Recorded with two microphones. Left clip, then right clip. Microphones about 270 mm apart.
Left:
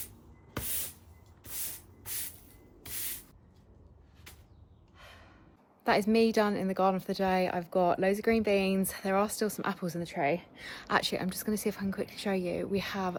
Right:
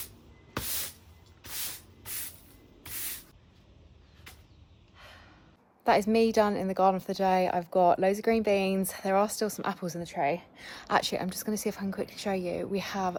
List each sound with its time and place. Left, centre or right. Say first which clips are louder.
2.8 s spray: right 1 dB; centre
5.8 s a woman's voice: right 2 dB; centre